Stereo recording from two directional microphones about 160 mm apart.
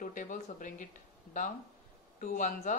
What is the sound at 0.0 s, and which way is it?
Speech, 55° left (ahead or behind).